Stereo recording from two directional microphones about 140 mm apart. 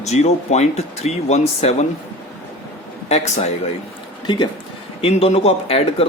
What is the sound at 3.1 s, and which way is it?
Speech, 55° left (ahead or behind).